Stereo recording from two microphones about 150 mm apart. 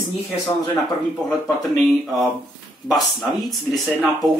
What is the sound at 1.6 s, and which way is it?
Speech, centre (ahead or behind).